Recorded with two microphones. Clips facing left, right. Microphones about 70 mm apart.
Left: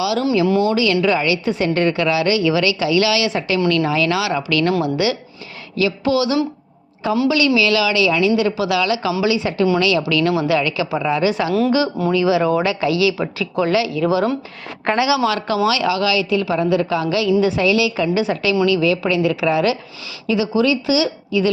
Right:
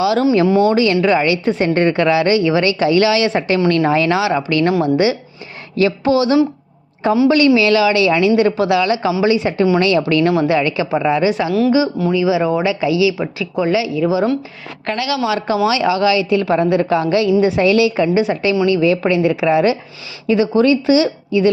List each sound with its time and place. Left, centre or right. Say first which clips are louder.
0.0 s a woman's voice: right 4 dB; right
0.4 s speech: right 2 dB; right
0.7 s a woman's voice: right 3 dB; right; by 14.2 s centre
14.8 s a woman's voice: left 4 dB; centre
15.2 s a woman's voice: right 1 dB; centre
17.6 s a woman's voice: right 4 dB; right
20.2 s a woman's voice: right 4 dB; right